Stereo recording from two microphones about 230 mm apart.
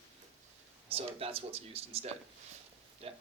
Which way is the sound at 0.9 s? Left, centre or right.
Right.